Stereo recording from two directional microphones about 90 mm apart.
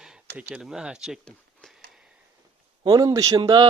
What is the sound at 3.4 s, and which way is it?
Speech, 55° right (ahead or behind).